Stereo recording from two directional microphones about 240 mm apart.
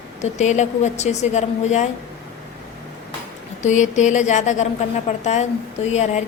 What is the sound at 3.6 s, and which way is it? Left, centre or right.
A woman's voice, left.